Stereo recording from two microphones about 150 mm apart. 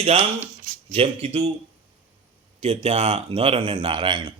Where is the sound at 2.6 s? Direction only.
45° right (ahead or behind).